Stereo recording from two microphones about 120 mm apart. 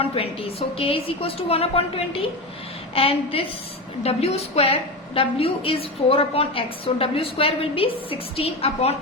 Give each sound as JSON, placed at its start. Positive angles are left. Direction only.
{"t": 0.0, "sound": "a woman's voice", "side_deg": 55}
{"t": 2.9, "sound": "a woman's voice", "side_deg": 50}